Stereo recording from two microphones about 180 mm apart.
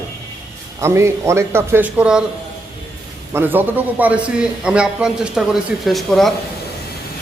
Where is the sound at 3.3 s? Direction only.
10° right (ahead or behind).